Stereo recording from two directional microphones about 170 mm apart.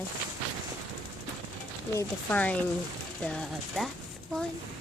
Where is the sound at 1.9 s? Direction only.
10° left (ahead or behind).